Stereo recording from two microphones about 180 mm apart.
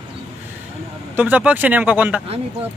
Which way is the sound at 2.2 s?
35° right (ahead or behind).